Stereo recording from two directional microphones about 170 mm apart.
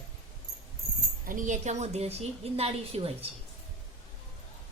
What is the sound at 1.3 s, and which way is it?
A woman's voice, 50° right (ahead or behind).